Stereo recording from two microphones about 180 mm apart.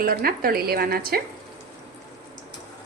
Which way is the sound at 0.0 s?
55° right (ahead or behind).